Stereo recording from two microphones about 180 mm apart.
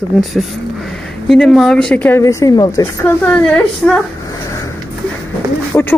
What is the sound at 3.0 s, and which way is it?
Speech, 10° left (ahead or behind).